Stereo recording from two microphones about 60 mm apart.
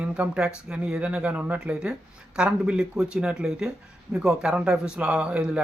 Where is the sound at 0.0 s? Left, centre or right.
Centre.